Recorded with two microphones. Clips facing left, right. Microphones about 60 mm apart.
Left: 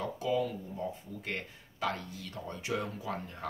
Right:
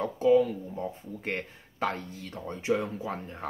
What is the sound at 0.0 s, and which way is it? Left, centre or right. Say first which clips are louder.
Speech: right 9 dB; right.